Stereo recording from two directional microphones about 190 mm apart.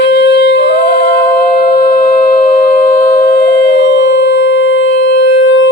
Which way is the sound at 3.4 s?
60° left (ahead or behind).